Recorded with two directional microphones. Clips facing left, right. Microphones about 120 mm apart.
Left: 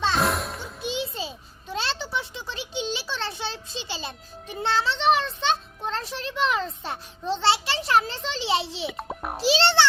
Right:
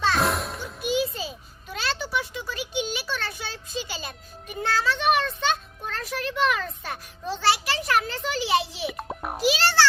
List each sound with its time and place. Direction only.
0.2 s music: centre (ahead or behind)
0.8 s a sound: 25° left (ahead or behind)
8.9 s music: centre (ahead or behind)
9.4 s music: 30° left (ahead or behind)